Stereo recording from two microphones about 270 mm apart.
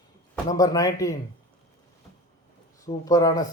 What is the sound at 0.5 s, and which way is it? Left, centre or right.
Speech, centre.